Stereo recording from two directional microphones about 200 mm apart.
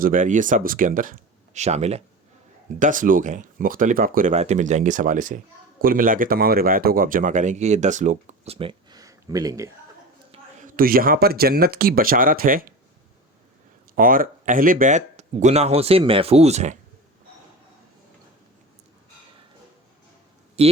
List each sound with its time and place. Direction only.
0.0 s speech: 40° right (ahead or behind); by 9.6 s 20° right (ahead or behind)
10.3 s speech: 40° right (ahead or behind)
13.9 s speech: 45° right (ahead or behind)
20.6 s speech: 30° right (ahead or behind)